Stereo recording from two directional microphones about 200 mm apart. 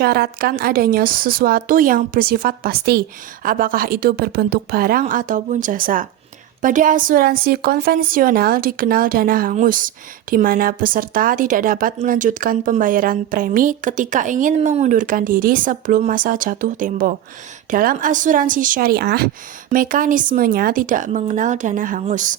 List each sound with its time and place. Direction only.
0.0 s a woman's voice: 50° right (ahead or behind)